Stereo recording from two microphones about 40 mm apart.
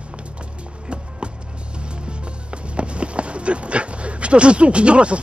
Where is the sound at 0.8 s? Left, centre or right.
Right.